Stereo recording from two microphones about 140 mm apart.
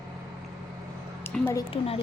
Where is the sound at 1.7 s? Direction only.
45° left (ahead or behind).